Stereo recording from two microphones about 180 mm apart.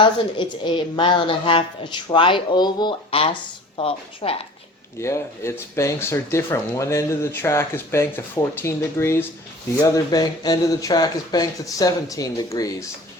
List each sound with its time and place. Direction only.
0.0 s a woman's voice: 25° left (ahead or behind)
4.9 s a woman's voice: 15° left (ahead or behind)